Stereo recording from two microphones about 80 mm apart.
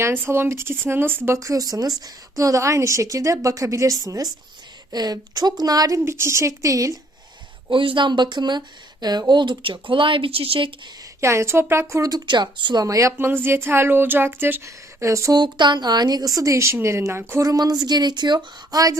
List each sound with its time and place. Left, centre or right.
0.0 s speech: right
1.4 s a woman's voice: right
6.1 s a woman's voice: right
7.7 s speech: right
11.2 s a woman's voice: right
12.1 s speech: right
12.8 s speech: right
15.0 s a woman's voice: right
15.3 s a woman's voice: right
17.4 s a woman's voice: right
18.3 s a woman's voice: right